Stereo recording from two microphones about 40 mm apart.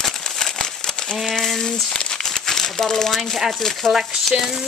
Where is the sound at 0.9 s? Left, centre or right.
Left.